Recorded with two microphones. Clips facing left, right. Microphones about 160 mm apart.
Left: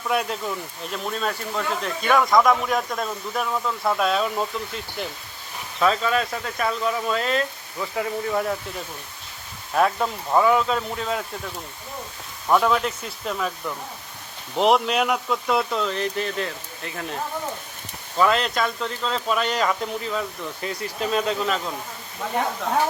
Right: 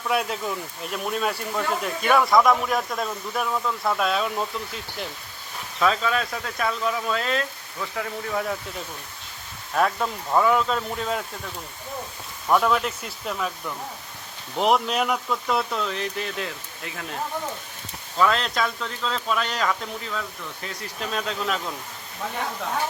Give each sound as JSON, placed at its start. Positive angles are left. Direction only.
{"t": 0.1, "sound": "speech", "side_deg": 0}
{"t": 9.7, "sound": "speech", "side_deg": 5}
{"t": 12.5, "sound": "speech", "side_deg": 0}
{"t": 18.2, "sound": "speech", "side_deg": 5}
{"t": 21.0, "sound": "speech", "side_deg": 5}